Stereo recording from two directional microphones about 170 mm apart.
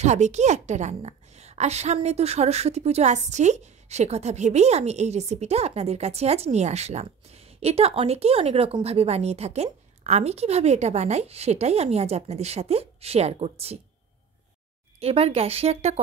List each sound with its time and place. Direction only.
0.0 s a woman's voice: 45° right (ahead or behind)
15.0 s a woman's voice: 35° right (ahead or behind)